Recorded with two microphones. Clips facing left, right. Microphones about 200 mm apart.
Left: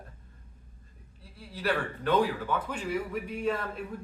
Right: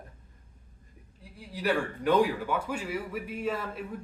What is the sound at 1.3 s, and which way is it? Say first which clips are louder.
A man's voice: right 2 dB; 15° right (ahead or behind).